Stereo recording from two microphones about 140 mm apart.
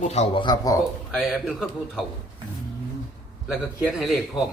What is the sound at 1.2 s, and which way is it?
Speech, centre (ahead or behind).